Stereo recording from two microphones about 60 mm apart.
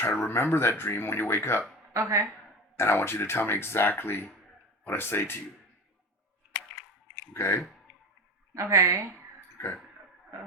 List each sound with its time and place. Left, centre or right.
0.0 s speech: left
1.9 s speech: right
2.7 s speech: left
7.3 s speech: left
8.5 s a woman's voice: right
9.6 s a sound: left